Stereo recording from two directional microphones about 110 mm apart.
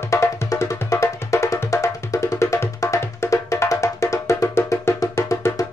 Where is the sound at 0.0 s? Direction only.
25° left (ahead or behind).